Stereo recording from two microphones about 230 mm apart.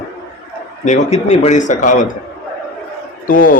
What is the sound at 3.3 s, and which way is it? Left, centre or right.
Speech, left.